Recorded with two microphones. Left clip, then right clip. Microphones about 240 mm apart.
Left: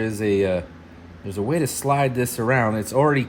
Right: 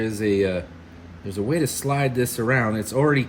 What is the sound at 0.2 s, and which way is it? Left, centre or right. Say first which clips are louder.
Speech: left 1 dB; left.